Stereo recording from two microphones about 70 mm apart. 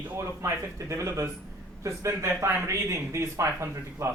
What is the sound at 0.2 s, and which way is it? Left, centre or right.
A man's voice, right.